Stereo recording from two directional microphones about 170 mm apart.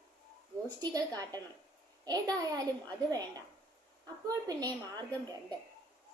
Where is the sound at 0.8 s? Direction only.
20° right (ahead or behind).